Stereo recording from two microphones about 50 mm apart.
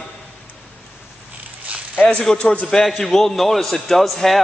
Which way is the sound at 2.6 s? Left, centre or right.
Centre.